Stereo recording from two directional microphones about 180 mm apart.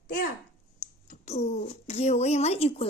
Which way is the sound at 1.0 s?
40° left (ahead or behind).